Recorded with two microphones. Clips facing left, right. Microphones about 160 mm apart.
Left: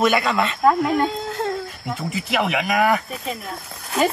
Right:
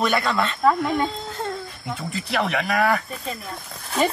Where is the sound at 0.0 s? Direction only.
Centre (ahead or behind).